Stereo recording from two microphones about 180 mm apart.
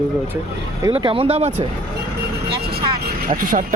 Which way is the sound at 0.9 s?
30° right (ahead or behind).